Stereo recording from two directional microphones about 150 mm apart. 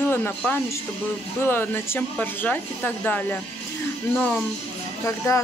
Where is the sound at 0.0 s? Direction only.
15° left (ahead or behind).